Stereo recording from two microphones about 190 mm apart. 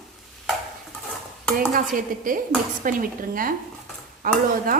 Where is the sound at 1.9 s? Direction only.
45° right (ahead or behind).